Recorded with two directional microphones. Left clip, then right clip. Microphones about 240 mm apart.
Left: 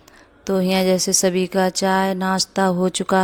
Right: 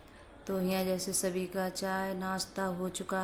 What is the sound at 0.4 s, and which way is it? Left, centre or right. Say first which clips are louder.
A woman's voice: left 14 dB; left.